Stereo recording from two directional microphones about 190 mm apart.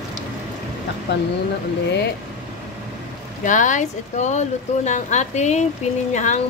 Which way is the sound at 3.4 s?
40° left (ahead or behind).